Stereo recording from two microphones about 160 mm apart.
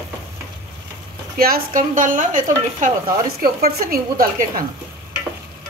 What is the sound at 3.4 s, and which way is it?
Speech, 65° right (ahead or behind).